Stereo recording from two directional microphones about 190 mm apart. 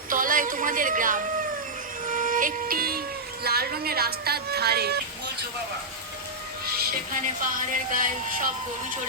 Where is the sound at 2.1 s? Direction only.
45° right (ahead or behind).